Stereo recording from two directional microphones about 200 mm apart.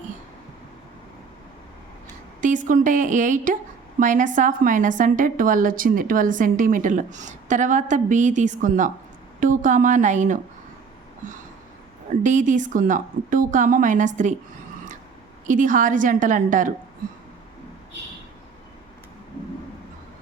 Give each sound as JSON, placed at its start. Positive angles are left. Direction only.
{"t": 2.4, "sound": "a woman's voice", "side_deg": -40}
{"t": 12.2, "sound": "a woman's voice", "side_deg": -40}
{"t": 15.4, "sound": "a woman's voice", "side_deg": -40}